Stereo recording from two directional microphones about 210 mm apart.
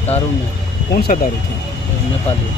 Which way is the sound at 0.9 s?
45° left (ahead or behind).